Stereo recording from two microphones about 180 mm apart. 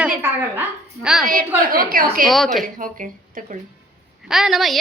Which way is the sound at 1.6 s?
55° right (ahead or behind).